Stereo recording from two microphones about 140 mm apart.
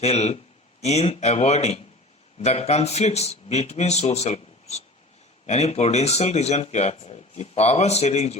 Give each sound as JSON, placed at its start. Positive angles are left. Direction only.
{"t": 0.0, "sound": "speech", "side_deg": 50}